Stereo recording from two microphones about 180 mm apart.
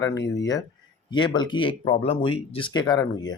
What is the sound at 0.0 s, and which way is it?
Speech, 20° left (ahead or behind).